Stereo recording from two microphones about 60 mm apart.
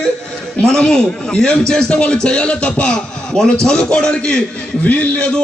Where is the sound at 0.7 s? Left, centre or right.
Centre.